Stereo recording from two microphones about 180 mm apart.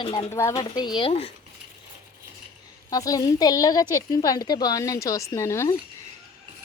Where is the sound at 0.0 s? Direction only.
25° left (ahead or behind).